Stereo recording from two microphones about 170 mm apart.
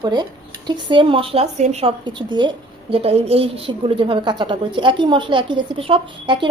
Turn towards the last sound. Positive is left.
turn(degrees=-30)  # may be behind; listen again after turning